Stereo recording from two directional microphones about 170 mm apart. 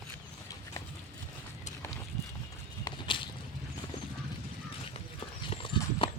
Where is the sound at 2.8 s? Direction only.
30° left (ahead or behind).